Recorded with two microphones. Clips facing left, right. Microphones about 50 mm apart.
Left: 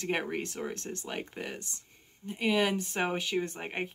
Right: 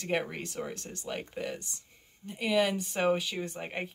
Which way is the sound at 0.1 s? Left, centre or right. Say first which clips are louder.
Right 1 dB; centre.